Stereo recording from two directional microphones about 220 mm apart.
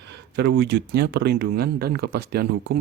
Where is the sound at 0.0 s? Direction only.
50° right (ahead or behind).